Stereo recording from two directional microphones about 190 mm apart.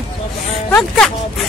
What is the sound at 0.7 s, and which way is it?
Speech, 5° left (ahead or behind).